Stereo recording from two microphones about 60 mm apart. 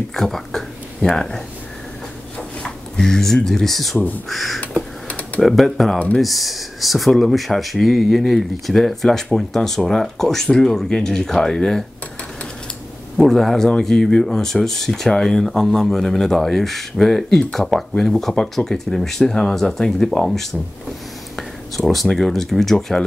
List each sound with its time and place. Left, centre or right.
0.1 s speech: centre
2.6 s speech: centre
5.0 s computer keyboard: left
5.4 s speech: centre
13.2 s speech: centre